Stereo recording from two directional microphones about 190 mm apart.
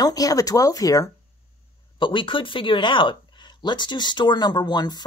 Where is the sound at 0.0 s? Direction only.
20° left (ahead or behind).